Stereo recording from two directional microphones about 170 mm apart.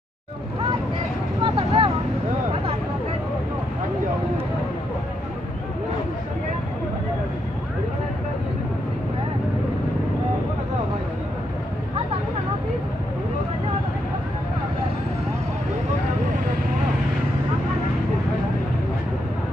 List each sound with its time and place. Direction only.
1.4 s vehicle: 30° right (ahead or behind)